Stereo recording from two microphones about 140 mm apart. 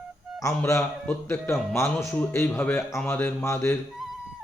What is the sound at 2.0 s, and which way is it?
A man's voice, 15° left (ahead or behind).